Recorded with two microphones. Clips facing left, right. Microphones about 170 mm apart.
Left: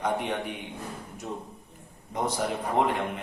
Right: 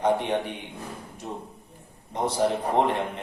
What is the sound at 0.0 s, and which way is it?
Speech, 30° right (ahead or behind).